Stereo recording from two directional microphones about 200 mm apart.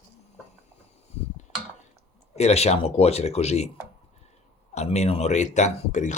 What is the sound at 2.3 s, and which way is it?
Speech, 30° left (ahead or behind).